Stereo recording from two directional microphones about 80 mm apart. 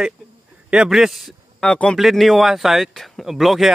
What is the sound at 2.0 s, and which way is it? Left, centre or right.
Speech, centre.